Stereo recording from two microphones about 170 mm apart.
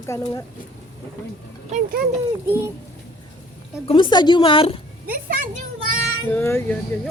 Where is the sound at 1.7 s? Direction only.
60° right (ahead or behind).